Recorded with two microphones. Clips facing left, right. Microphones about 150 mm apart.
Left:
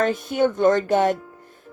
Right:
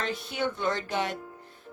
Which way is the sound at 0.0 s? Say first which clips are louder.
Left 11 dB; 45° left (ahead or behind).